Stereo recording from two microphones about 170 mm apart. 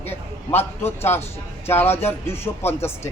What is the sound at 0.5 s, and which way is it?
Speech, 15° left (ahead or behind).